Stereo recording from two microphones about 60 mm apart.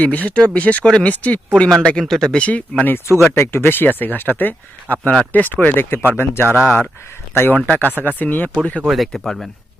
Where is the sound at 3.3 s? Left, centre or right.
Left.